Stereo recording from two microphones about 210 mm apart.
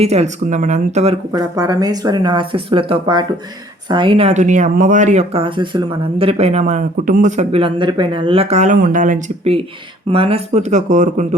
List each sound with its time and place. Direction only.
0.0 s speech: 30° right (ahead or behind)
1.3 s speech: 15° right (ahead or behind); by 11.3 s 35° right (ahead or behind)